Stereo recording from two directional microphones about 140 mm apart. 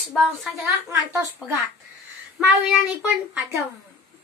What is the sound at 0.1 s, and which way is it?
Speech, centre (ahead or behind).